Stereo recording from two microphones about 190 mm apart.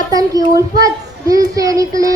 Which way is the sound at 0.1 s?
20° right (ahead or behind).